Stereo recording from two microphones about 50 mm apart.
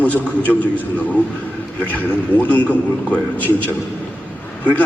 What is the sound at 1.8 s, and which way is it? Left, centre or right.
A man's voice, left.